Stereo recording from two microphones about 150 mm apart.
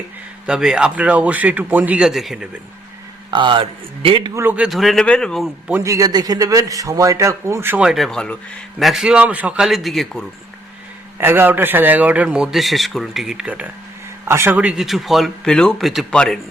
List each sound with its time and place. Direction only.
0.4 s speech: 5° right (ahead or behind)
3.3 s a man's voice: 35° right (ahead or behind)
4.4 s speech: 10° right (ahead or behind); by 5.5 s 5° left (ahead or behind)
5.8 s a man's voice: 25° right (ahead or behind); by 10.2 s centre (ahead or behind)
11.2 s a man's voice: 15° right (ahead or behind); by 16.4 s 5° left (ahead or behind)